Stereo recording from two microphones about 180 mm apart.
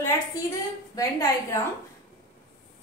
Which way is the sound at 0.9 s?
20° left (ahead or behind).